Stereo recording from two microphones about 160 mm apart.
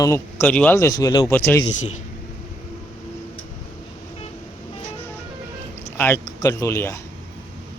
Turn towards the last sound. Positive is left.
turn(degrees=15)  # may be behind; listen again after turning